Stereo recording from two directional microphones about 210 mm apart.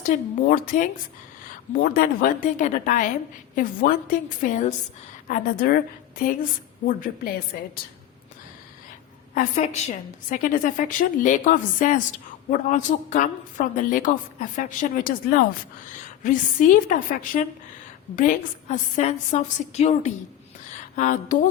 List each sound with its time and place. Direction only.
0.0 s a woman's voice: 40° left (ahead or behind)
9.3 s a woman's voice: 35° left (ahead or behind)